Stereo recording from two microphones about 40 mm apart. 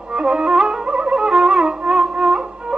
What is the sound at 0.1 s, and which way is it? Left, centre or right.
Music, centre.